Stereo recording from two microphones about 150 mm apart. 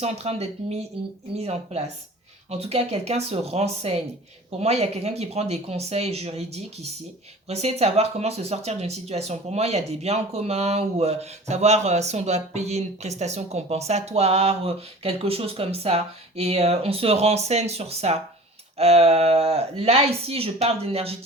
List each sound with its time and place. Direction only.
0.0 s speech: 45° right (ahead or behind)